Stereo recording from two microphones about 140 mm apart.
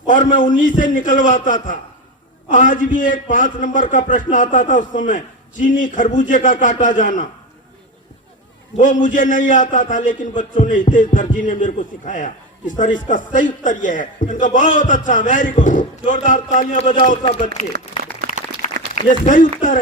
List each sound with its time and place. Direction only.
0.1 s a man's voice: 70° left (ahead or behind)
8.8 s a man's voice: 65° left (ahead or behind)
19.0 s a man's voice: 70° left (ahead or behind)